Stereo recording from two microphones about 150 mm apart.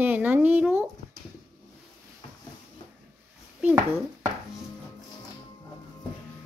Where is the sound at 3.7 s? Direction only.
15° right (ahead or behind).